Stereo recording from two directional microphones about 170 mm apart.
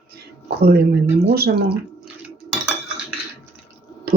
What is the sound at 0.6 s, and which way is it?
Speech, 65° right (ahead or behind).